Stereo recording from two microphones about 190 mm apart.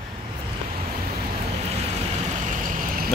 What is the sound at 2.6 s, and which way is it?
Vehicle, 50° right (ahead or behind).